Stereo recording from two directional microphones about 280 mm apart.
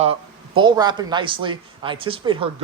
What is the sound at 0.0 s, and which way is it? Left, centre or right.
Speech, centre.